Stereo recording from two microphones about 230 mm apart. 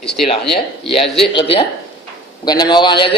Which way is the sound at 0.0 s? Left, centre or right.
Centre.